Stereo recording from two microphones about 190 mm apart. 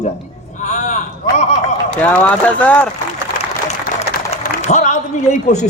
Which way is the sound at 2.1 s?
5° left (ahead or behind).